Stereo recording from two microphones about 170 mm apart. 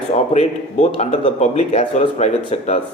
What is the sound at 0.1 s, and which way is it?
Speech, 40° left (ahead or behind).